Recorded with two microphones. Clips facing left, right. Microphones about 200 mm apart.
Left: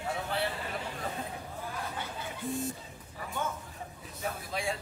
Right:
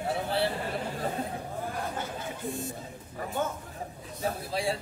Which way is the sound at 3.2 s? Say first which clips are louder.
Right 5 dB; 45° right (ahead or behind).